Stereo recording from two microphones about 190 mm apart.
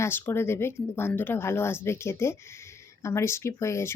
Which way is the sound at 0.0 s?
10° left (ahead or behind).